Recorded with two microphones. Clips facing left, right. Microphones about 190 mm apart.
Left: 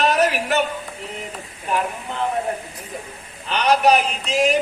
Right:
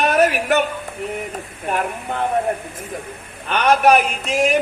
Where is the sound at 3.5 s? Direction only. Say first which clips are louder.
Right 2 dB; 55° right (ahead or behind).